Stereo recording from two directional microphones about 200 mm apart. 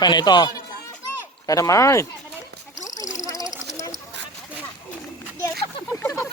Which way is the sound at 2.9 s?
15° left (ahead or behind).